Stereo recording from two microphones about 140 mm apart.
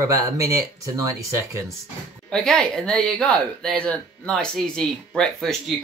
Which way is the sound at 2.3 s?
5° left (ahead or behind).